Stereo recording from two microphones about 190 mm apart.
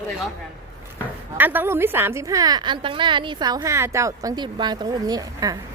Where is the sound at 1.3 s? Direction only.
10° right (ahead or behind).